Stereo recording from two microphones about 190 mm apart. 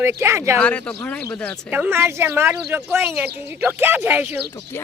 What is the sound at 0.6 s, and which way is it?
Speech, 5° left (ahead or behind).